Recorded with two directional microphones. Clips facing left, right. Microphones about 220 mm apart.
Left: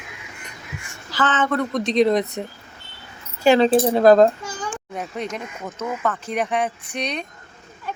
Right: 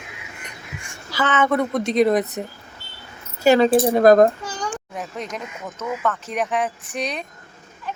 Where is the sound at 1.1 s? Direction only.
10° right (ahead or behind).